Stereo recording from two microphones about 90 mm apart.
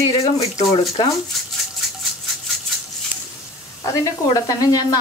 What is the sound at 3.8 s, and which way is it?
Speech, 40° left (ahead or behind).